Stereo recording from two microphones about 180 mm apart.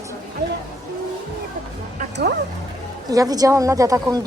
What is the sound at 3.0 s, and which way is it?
Speech, 20° right (ahead or behind).